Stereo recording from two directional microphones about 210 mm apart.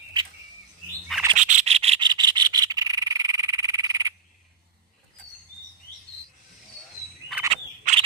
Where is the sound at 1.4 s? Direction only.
35° right (ahead or behind); by 4.1 s 15° right (ahead or behind).